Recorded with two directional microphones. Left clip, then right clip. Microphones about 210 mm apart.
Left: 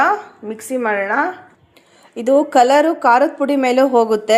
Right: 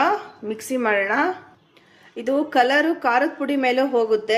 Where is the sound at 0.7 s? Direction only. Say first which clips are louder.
Left 3 dB; 5° left (ahead or behind).